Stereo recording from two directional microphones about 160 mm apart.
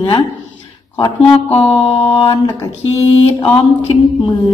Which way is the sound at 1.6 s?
35° left (ahead or behind).